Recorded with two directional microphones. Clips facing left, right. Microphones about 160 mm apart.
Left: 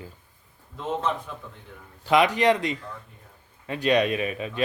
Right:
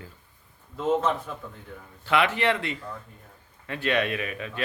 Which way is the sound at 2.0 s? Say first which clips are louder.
Left 4 dB; 15° left (ahead or behind).